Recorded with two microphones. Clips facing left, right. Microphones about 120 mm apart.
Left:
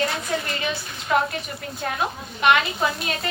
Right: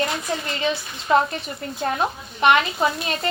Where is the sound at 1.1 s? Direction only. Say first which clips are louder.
Right 3 dB; 25° right (ahead or behind).